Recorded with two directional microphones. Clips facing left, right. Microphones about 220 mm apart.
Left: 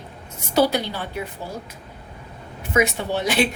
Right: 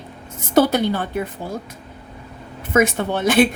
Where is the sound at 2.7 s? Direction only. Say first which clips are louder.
Right 3 dB; 50° right (ahead or behind).